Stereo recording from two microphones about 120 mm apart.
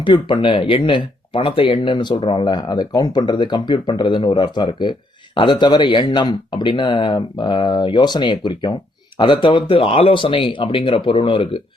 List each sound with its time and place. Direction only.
0.0 s speech: 40° left (ahead or behind)